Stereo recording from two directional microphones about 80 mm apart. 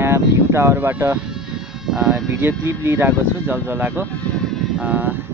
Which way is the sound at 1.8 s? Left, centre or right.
Centre.